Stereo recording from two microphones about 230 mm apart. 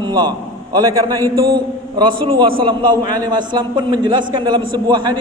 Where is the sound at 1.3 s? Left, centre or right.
Centre.